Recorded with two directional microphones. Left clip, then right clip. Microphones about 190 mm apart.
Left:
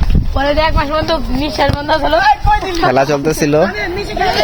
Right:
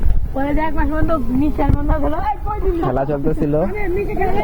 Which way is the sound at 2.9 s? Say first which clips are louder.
Left 7 dB; 35° left (ahead or behind).